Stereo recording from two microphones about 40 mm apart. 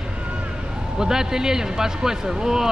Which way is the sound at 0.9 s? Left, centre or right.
Centre.